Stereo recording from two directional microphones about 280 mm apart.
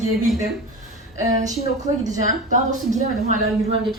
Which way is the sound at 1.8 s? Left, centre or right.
Right.